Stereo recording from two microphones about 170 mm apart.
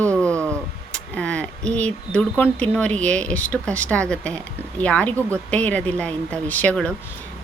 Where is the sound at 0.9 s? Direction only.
5° left (ahead or behind).